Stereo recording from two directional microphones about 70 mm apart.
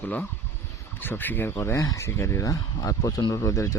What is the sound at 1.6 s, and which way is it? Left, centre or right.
Speech, left.